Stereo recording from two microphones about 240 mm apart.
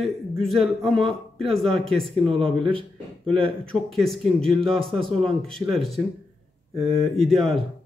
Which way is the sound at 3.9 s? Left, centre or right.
Centre.